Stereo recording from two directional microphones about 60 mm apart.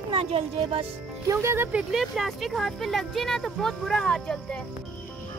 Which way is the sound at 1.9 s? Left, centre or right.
Centre.